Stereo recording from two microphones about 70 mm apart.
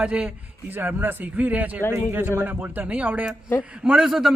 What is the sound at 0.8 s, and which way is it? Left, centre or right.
Speech, right.